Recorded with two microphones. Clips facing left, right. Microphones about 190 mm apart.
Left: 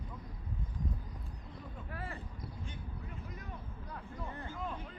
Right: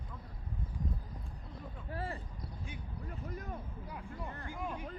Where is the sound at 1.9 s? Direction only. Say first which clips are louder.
Right 5 dB; 30° right (ahead or behind).